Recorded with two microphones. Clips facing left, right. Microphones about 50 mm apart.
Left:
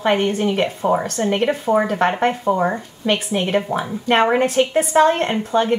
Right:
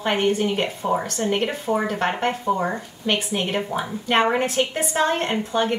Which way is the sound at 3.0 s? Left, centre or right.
Centre.